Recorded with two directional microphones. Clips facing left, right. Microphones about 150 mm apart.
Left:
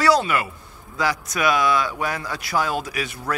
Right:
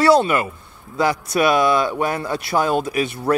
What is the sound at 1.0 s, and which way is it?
Speech, 25° right (ahead or behind).